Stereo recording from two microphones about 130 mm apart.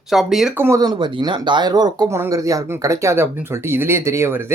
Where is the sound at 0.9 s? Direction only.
35° right (ahead or behind).